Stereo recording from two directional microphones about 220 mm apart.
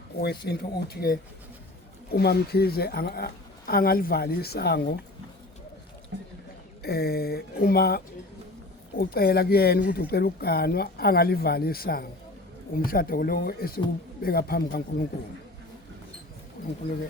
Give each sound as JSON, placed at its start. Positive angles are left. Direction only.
{"t": 0.2, "sound": "speech", "side_deg": 45}
{"t": 6.1, "sound": "rowboat", "side_deg": -55}
{"t": 6.8, "sound": "speech", "side_deg": 45}